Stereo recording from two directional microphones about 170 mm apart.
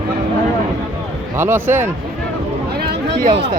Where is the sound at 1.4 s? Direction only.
15° right (ahead or behind).